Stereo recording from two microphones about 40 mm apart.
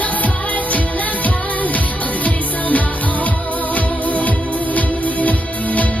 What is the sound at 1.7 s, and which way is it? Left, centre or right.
Music, left.